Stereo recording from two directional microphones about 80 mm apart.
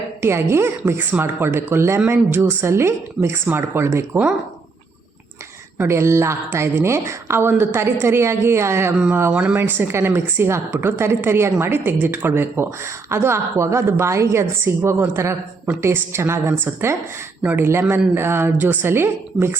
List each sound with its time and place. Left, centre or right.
0.2 s speech: right
5.7 s speech: right
9.3 s speech: centre